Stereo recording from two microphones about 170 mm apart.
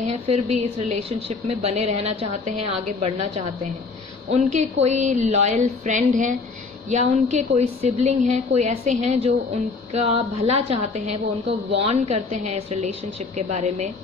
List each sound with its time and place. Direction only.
0.0 s a woman's voice: 40° right (ahead or behind)